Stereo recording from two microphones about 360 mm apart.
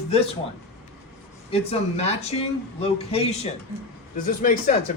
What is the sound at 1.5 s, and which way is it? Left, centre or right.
Speech, centre.